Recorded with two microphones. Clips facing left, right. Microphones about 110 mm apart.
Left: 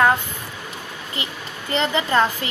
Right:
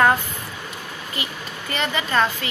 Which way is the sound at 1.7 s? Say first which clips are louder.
Left 4 dB; 25° left (ahead or behind).